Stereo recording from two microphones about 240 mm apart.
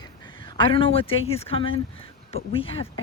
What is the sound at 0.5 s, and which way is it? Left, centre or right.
Speech, left.